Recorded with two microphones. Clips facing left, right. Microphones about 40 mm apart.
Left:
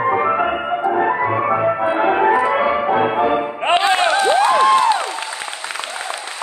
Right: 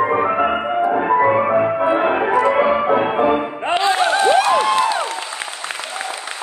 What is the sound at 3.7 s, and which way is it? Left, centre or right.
Music, left.